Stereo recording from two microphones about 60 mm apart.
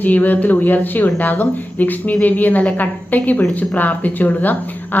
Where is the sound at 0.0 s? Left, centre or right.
Left.